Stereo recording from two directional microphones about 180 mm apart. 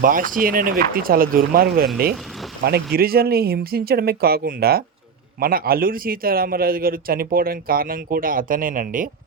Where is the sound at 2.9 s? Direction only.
55° right (ahead or behind).